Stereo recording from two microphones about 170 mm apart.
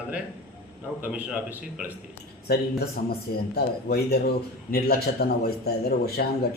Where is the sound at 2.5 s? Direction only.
65° left (ahead or behind).